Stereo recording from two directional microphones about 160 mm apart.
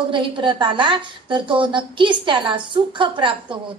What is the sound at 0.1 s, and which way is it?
A woman's voice, 30° right (ahead or behind).